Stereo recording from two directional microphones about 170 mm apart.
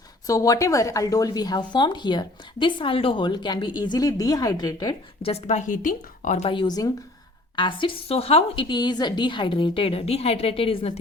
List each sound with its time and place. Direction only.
0.3 s speech: 20° left (ahead or behind)
5.2 s a woman's voice: 40° left (ahead or behind)
6.5 s a woman's voice: 25° left (ahead or behind)